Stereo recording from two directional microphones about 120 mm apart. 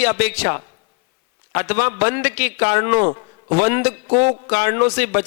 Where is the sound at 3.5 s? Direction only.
25° right (ahead or behind).